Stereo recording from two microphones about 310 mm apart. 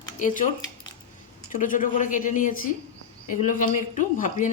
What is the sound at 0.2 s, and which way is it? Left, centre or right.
Speech, left.